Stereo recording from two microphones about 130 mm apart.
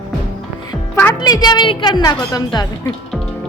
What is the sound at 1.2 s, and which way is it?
Speech, 30° left (ahead or behind).